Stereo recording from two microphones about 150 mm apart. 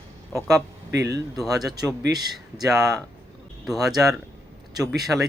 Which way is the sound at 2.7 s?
Centre (ahead or behind).